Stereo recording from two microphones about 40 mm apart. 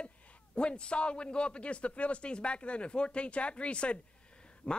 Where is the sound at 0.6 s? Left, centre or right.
Left.